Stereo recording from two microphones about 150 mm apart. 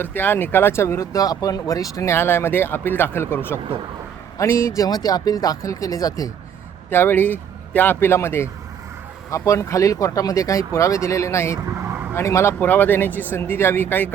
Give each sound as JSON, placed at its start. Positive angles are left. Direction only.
{"t": 0.0, "sound": "speech", "side_deg": 15}